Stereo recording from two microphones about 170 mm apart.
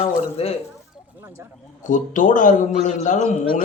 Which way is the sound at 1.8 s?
50° left (ahead or behind).